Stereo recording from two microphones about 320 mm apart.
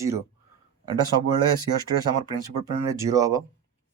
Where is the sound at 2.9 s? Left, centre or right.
Centre.